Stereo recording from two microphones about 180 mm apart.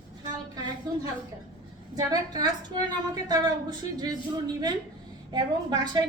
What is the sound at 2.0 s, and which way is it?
A woman's voice, 25° right (ahead or behind).